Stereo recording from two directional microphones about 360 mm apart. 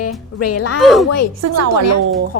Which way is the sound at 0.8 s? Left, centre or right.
Centre.